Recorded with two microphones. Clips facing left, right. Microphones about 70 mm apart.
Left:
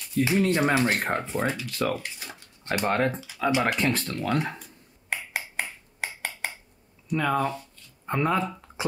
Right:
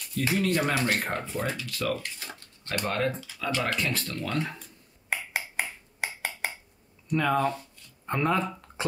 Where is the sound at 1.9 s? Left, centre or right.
Centre.